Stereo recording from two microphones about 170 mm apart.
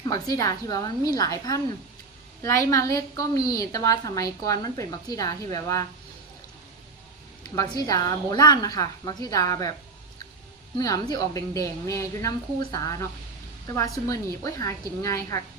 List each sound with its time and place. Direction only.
0.0 s a woman's voice: 20° left (ahead or behind)
7.4 s a woman's voice: 25° left (ahead or behind)
10.8 s a woman's voice: 20° left (ahead or behind)